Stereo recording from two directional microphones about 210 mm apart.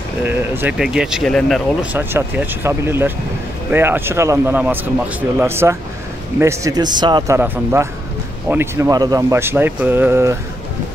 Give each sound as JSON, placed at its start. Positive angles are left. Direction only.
{"t": 0.2, "sound": "speech", "side_deg": -10}
{"t": 2.0, "sound": "a man's voice", "side_deg": -10}